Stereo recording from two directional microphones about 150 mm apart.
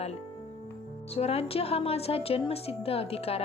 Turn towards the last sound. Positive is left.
turn(degrees=40)  # may be behind; listen again after turning